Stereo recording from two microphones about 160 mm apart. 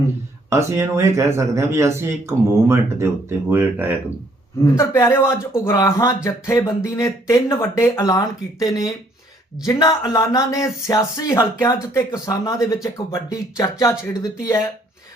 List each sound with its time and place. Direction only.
0.5 s speech: 20° right (ahead or behind)
4.8 s a man's voice: 20° left (ahead or behind)